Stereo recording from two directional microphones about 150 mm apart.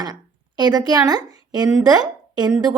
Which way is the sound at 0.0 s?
25° right (ahead or behind).